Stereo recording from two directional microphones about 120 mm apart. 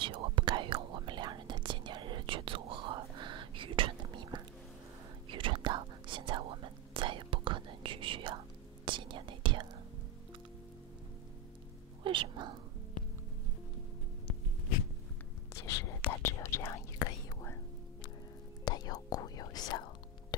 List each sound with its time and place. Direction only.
0.0 s whispering: 45° right (ahead or behind)
12.0 s a sound: 45° right (ahead or behind)
15.5 s whispering: 25° left (ahead or behind)
18.7 s whispering: 35° left (ahead or behind)